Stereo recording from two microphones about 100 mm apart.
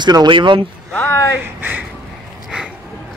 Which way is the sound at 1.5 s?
20° right (ahead or behind).